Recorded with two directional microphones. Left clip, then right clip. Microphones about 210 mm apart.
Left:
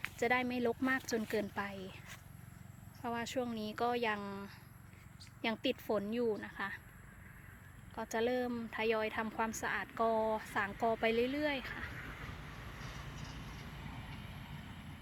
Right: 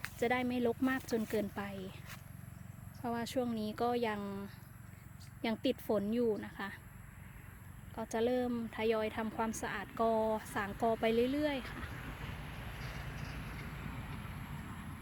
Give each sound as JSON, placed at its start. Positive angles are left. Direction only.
{"t": 0.0, "sound": "speech", "side_deg": -5}
{"t": 3.0, "sound": "a woman's voice", "side_deg": -10}
{"t": 7.9, "sound": "a woman's voice", "side_deg": -5}
{"t": 11.9, "sound": "vehicle", "side_deg": 40}